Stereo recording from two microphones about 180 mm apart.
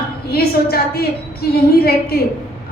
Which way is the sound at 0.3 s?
60° left (ahead or behind).